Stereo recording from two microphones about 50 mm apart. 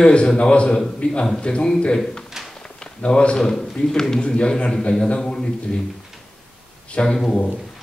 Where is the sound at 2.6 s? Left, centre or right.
Centre.